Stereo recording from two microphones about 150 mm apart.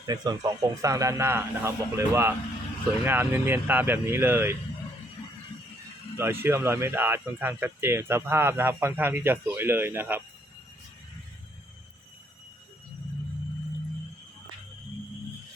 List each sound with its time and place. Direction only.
0.0 s speech: 25° right (ahead or behind)
6.1 s speech: 15° right (ahead or behind)